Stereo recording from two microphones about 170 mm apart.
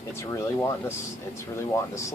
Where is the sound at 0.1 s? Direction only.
15° left (ahead or behind).